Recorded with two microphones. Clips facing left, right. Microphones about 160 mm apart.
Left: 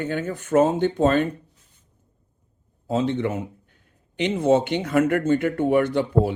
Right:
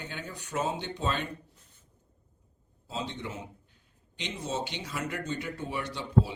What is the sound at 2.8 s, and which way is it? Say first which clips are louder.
A man's voice: left 14 dB; 60° left (ahead or behind).